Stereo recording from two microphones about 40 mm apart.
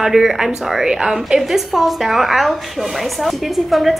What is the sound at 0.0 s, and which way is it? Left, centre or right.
A woman's voice, centre.